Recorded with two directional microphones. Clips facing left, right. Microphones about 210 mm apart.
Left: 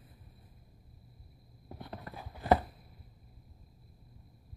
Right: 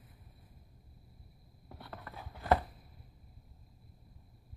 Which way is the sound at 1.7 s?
20° left (ahead or behind).